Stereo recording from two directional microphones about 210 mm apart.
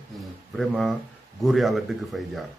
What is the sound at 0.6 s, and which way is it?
A man's voice, centre (ahead or behind).